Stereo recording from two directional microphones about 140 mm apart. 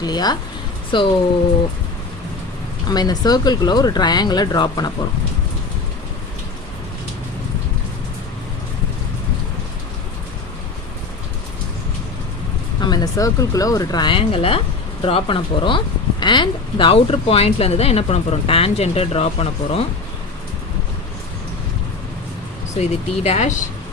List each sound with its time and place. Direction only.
0.0 s speech: 30° left (ahead or behind)
2.8 s speech: 30° left (ahead or behind)
12.8 s speech: 30° left (ahead or behind); by 19.8 s 45° left (ahead or behind)
22.8 s speech: 50° left (ahead or behind)